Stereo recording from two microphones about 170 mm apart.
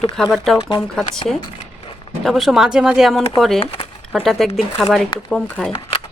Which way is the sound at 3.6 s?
30° left (ahead or behind).